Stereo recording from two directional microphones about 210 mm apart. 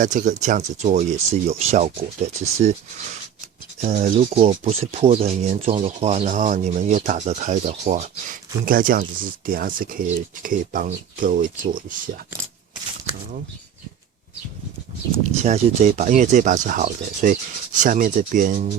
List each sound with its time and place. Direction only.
0.0 s speech: 35° right (ahead or behind)
3.8 s speech: 35° right (ahead or behind)
15.2 s speech: 35° right (ahead or behind)